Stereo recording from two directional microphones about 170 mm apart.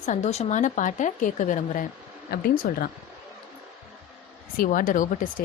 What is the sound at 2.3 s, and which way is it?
Speech, 60° left (ahead or behind).